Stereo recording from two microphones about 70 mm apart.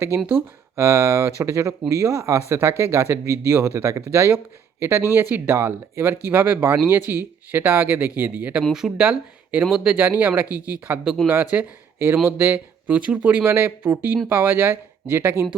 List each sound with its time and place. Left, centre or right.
0.3 s speech: right
8.7 s speech: centre
9.0 s speech: centre
10.0 s speech: right
12.5 s speech: right
13.5 s speech: right